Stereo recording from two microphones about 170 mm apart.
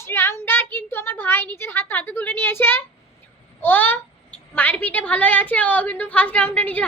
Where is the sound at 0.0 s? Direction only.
15° left (ahead or behind).